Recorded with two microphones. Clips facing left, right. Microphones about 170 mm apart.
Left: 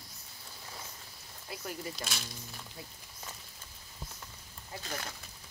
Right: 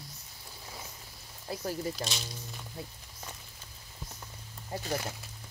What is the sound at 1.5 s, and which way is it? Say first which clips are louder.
Speech: right 6 dB; 35° right (ahead or behind).